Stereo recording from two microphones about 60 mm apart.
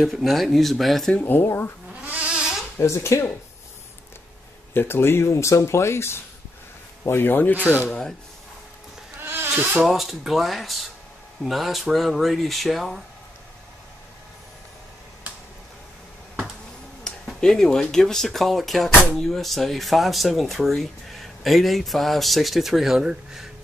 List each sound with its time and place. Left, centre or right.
0.0 s speech: centre
1.2 s speech: left
2.0 s a sound: right
2.8 s speech: left
4.7 s speech: left
7.1 s speech: left
9.2 s insect: right
9.8 s speech: centre
17.1 s a sound: centre
17.4 s speech: centre